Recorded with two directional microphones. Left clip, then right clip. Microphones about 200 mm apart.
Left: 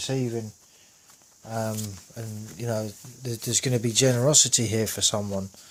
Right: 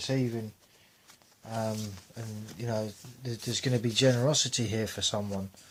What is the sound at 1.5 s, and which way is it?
Speech, 45° left (ahead or behind).